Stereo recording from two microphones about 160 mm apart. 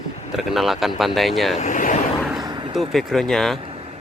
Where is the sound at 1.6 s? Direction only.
55° left (ahead or behind).